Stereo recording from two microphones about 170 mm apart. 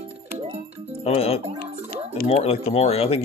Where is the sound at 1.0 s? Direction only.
35° left (ahead or behind).